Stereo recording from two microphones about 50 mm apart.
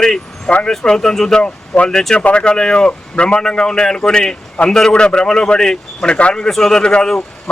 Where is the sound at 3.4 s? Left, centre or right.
Centre.